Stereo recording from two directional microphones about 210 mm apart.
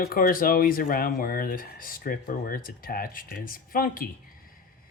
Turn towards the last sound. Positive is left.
turn(degrees=40)  # may be behind; listen again after turning